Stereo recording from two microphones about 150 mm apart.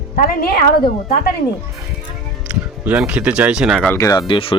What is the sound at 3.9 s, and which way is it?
Speech, 20° left (ahead or behind).